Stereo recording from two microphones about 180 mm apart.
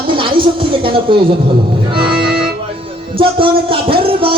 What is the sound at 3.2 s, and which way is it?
Music, 30° right (ahead or behind).